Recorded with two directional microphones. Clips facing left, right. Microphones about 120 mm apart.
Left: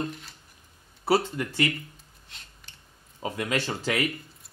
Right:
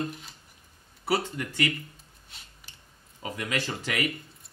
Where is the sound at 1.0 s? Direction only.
30° left (ahead or behind).